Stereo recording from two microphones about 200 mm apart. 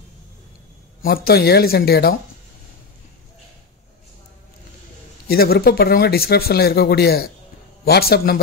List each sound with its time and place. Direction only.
1.0 s speech: 50° left (ahead or behind)
5.3 s speech: 50° left (ahead or behind)